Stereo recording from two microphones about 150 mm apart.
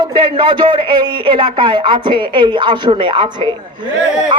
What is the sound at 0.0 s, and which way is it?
A man's voice, 30° right (ahead or behind).